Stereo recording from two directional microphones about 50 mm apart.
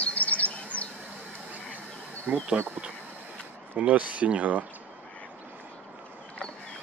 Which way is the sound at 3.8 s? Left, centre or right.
Right.